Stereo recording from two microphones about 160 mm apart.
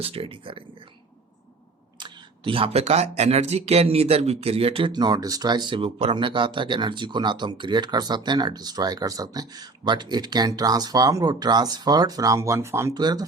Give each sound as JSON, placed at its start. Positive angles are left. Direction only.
{"t": 0.0, "sound": "speech", "side_deg": -35}
{"t": 2.0, "sound": "speech", "side_deg": -30}
{"t": 4.9, "sound": "speech", "side_deg": -25}